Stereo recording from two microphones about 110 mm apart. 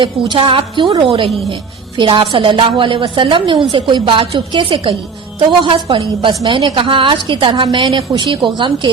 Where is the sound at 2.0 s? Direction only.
50° right (ahead or behind).